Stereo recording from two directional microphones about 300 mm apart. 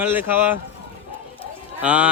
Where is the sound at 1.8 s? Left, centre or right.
Centre.